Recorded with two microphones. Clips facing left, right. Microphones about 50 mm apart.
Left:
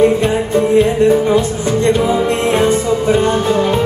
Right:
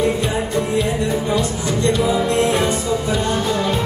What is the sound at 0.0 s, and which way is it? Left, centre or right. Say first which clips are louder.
Music: left 7 dB; left.